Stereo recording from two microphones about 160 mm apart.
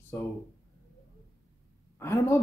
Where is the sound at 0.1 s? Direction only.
15° left (ahead or behind).